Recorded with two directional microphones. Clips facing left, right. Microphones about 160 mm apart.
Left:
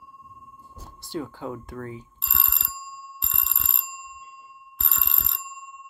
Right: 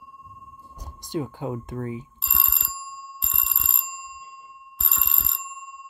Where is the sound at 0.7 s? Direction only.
15° right (ahead or behind).